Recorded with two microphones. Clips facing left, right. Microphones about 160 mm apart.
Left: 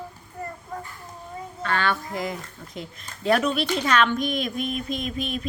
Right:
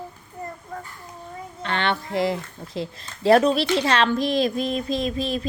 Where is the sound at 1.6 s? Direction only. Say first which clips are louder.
Right 1 dB; 25° right (ahead or behind).